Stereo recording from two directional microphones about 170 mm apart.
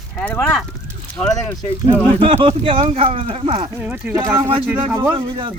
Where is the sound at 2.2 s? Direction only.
30° right (ahead or behind).